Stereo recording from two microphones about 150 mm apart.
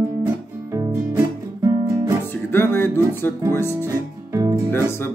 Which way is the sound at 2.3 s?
15° left (ahead or behind).